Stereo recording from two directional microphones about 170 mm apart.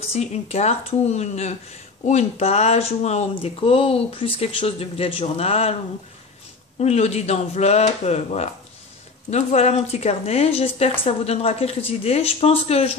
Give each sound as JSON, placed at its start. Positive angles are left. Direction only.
{"t": 0.0, "sound": "speech", "side_deg": 40}
{"t": 6.8, "sound": "speech", "side_deg": 40}